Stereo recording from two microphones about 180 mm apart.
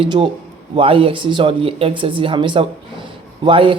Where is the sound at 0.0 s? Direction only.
30° right (ahead or behind).